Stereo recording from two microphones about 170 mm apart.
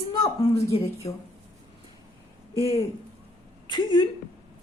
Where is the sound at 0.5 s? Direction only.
35° left (ahead or behind).